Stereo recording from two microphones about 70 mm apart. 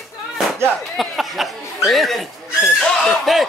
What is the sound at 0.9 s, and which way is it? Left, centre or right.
Speech, centre.